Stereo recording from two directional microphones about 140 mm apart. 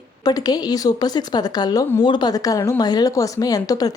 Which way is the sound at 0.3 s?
30° left (ahead or behind).